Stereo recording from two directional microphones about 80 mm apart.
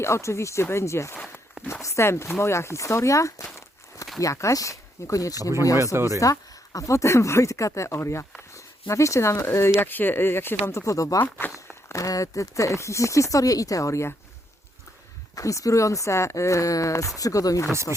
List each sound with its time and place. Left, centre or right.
0.0 s speech: left
5.7 s speech: right
6.1 s speech: left
11.4 s walk: left
11.9 s speech: left
15.4 s speech: left